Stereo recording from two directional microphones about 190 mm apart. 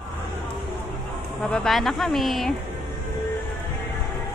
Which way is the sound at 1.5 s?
Centre (ahead or behind).